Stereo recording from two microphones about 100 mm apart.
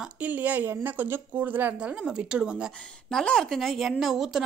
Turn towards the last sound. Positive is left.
turn(degrees=0)  # may be behind; listen again after turning